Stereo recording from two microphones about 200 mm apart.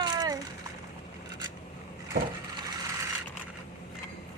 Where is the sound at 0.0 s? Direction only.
20° right (ahead or behind).